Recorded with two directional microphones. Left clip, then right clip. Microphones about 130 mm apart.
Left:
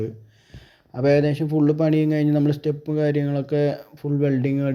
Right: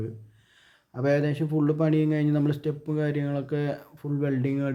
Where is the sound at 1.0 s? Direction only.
25° left (ahead or behind).